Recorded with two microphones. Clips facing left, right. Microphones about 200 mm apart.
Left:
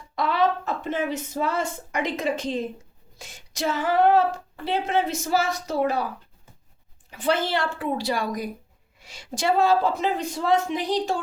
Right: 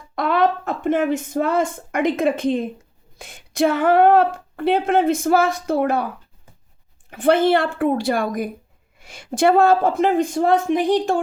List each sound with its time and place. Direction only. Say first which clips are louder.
0.2 s a woman's voice: right 4 dB; 55° right (ahead or behind)
7.1 s a woman's voice: right 9 dB; 55° right (ahead or behind)